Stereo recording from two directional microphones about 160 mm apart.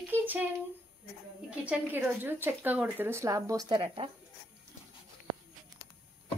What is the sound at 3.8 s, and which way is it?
Speech, 35° right (ahead or behind).